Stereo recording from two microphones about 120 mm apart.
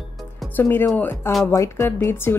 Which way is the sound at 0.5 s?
20° left (ahead or behind).